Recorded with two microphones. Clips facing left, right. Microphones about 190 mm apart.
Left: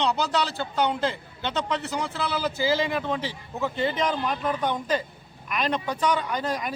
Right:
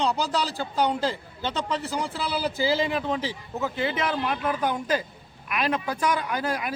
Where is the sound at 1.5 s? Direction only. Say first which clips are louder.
Even; 35° right (ahead or behind).